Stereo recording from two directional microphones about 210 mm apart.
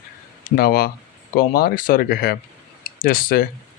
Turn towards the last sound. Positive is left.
turn(degrees=40)  # may be behind; listen again after turning